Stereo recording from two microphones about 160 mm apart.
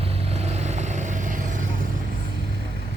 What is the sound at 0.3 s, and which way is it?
Vehicle, 40° right (ahead or behind).